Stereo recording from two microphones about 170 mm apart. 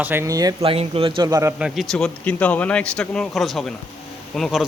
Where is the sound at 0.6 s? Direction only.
35° right (ahead or behind).